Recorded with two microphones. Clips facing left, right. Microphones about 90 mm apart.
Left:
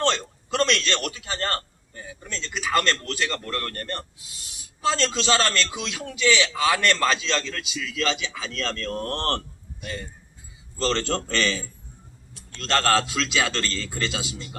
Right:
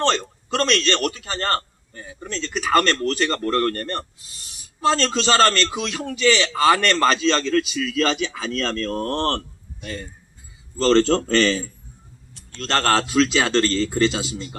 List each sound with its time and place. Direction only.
0.5 s a man's voice: 45° right (ahead or behind)
2.2 s a man's voice: 40° right (ahead or behind)
10.8 s speech: 40° right (ahead or behind)